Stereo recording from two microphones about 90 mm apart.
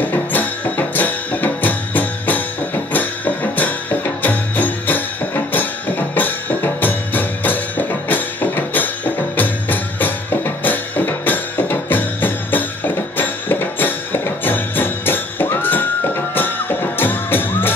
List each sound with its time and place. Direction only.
0.0 s music: 20° left (ahead or behind)